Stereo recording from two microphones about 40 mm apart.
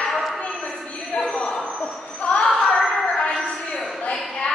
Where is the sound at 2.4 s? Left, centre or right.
Centre.